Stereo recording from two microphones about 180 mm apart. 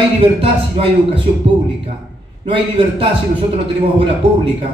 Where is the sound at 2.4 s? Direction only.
30° right (ahead or behind).